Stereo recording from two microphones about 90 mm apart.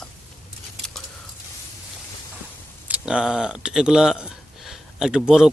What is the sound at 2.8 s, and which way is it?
A man's voice, 10° right (ahead or behind).